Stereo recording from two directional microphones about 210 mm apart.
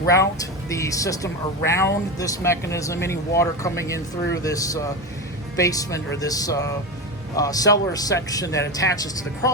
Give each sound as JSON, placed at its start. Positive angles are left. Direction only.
{"t": 0.1, "sound": "speech", "side_deg": 15}